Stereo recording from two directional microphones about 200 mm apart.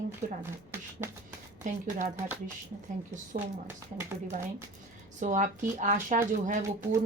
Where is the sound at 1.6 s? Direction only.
40° right (ahead or behind).